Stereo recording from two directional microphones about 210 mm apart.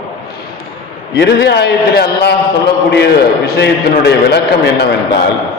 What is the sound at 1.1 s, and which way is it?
A man's voice, 50° left (ahead or behind).